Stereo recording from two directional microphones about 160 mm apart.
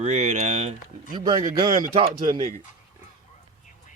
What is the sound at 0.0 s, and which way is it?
Speech, 45° right (ahead or behind).